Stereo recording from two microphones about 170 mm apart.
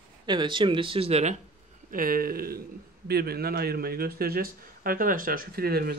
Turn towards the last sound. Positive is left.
turn(degrees=-65)  # may be behind; listen again after turning